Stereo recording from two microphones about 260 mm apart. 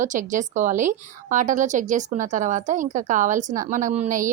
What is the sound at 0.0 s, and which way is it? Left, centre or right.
A woman's voice, right.